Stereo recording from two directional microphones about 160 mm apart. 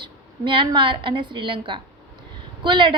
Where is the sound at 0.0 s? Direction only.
30° right (ahead or behind).